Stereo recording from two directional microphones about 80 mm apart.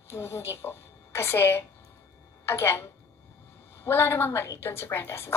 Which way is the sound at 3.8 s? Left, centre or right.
Left.